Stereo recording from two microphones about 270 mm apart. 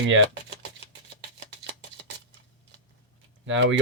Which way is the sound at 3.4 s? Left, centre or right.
Right.